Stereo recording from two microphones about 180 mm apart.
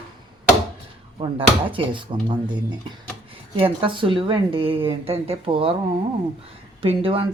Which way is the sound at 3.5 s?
30° right (ahead or behind).